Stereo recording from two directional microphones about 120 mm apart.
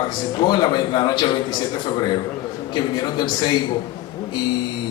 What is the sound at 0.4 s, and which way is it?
A man's voice, 35° left (ahead or behind).